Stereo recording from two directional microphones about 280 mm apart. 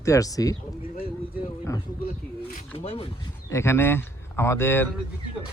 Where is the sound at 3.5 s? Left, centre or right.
Centre.